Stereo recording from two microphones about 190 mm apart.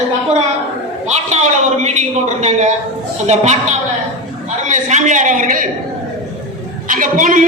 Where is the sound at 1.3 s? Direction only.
40° right (ahead or behind).